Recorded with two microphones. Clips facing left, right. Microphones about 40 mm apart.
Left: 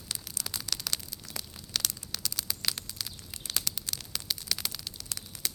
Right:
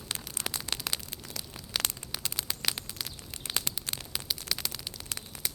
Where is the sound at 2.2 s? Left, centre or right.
Right.